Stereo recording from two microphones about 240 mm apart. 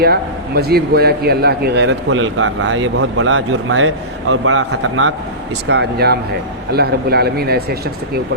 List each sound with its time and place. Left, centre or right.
0.0 s a man's voice: right
5.6 s speech: right